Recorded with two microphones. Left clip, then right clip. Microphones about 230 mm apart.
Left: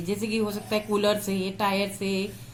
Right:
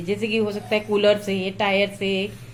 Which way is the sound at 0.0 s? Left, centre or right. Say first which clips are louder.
Right 5 dB; left.